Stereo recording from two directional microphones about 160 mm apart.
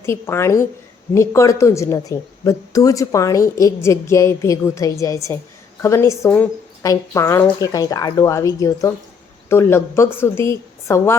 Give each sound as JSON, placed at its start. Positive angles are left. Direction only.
{"t": 0.0, "sound": "a woman's voice", "side_deg": 15}